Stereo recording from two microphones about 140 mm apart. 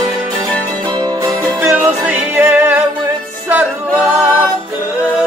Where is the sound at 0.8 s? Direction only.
30° right (ahead or behind); by 4.5 s 10° right (ahead or behind).